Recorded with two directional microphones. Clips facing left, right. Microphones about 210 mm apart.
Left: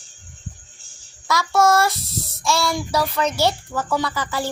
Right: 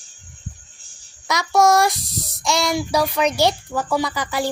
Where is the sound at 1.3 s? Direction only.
15° right (ahead or behind).